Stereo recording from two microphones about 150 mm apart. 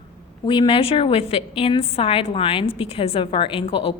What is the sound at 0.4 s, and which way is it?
A woman's voice, 35° left (ahead or behind).